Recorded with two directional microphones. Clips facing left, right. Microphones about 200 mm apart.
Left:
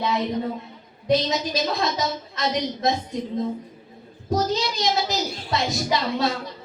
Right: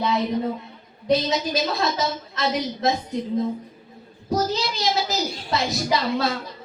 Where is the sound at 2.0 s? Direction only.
Centre (ahead or behind).